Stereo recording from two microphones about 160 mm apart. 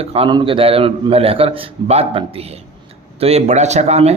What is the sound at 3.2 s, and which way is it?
Speech, 45° right (ahead or behind).